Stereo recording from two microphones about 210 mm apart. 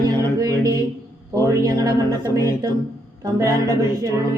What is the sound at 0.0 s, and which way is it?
Music, 15° right (ahead or behind).